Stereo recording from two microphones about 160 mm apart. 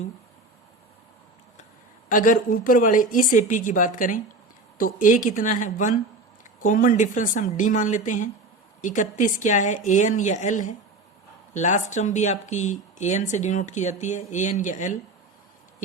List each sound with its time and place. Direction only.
2.0 s a woman's voice: 55° left (ahead or behind)